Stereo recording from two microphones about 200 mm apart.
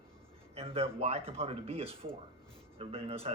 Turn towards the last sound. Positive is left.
turn(degrees=-30)  # may be behind; listen again after turning